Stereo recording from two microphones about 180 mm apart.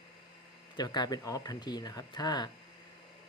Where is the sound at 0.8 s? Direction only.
25° left (ahead or behind).